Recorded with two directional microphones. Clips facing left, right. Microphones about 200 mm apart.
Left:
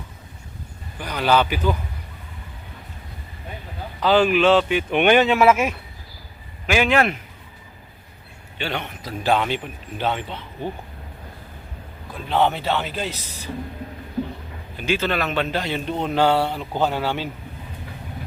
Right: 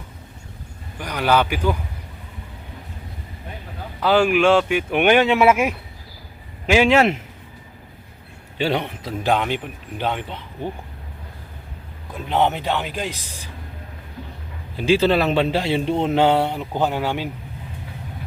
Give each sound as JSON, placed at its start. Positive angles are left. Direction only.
{"t": 0.9, "sound": "speech", "side_deg": -10}
{"t": 4.0, "sound": "speech", "side_deg": -10}
{"t": 6.7, "sound": "speech", "side_deg": -25}
{"t": 8.6, "sound": "a man's voice", "side_deg": -35}
{"t": 9.2, "sound": "speech", "side_deg": -15}
{"t": 12.1, "sound": "speech", "side_deg": -20}
{"t": 14.8, "sound": "speech", "side_deg": -30}